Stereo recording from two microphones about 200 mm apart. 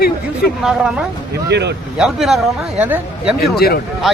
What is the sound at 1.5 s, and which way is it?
Speech, 60° right (ahead or behind).